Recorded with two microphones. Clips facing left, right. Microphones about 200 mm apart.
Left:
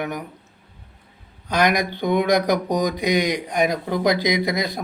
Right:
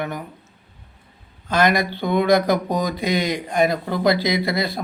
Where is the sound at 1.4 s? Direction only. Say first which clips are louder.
Right 1 dB; 15° left (ahead or behind).